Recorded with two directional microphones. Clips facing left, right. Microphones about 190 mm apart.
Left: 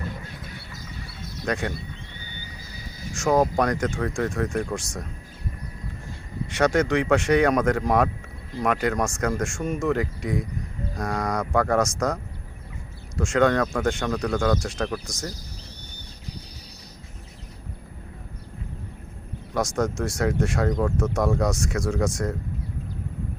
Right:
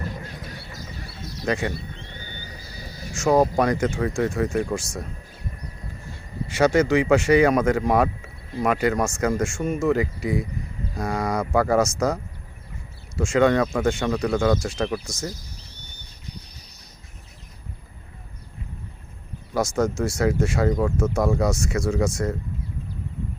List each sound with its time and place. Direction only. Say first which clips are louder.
1.5 s speech: right 2 dB; centre (ahead or behind)
2.1 s a sound: right 2 dB; 50° right (ahead or behind)
3.2 s speech: right 2 dB; 5° right (ahead or behind)
6.5 s speech: right 3 dB; 5° right (ahead or behind)
19.5 s speech: right 2 dB; centre (ahead or behind)